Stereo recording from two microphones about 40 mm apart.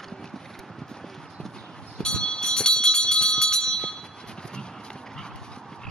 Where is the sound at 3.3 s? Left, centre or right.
Centre.